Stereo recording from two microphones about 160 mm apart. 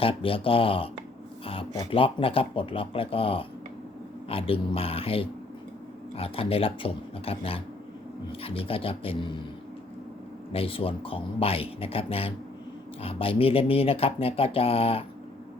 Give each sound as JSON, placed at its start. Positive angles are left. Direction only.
{"t": 0.0, "sound": "speech", "side_deg": 35}
{"t": 1.9, "sound": "speech", "side_deg": 35}
{"t": 10.5, "sound": "speech", "side_deg": 35}